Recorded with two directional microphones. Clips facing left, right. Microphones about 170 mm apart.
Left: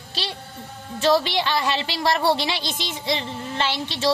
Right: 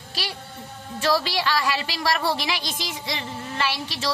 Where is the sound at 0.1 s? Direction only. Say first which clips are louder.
Left 1 dB; 25° left (ahead or behind).